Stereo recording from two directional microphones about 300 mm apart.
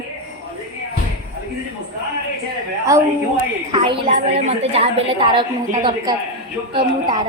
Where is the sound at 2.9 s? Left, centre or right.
Centre.